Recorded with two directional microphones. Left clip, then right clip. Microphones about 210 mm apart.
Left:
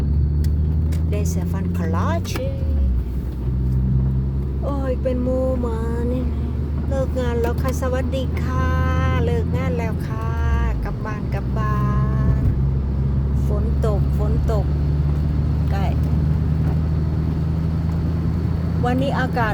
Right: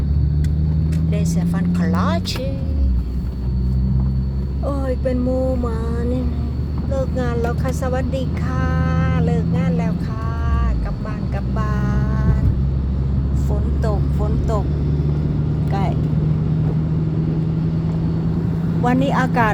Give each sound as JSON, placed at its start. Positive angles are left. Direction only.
{"t": 1.1, "sound": "speech", "side_deg": 5}
{"t": 6.9, "sound": "speech", "side_deg": 0}
{"t": 11.5, "sound": "vehicle", "side_deg": -5}
{"t": 18.9, "sound": "speech", "side_deg": -15}